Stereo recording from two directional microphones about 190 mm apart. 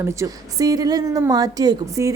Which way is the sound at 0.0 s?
15° right (ahead or behind).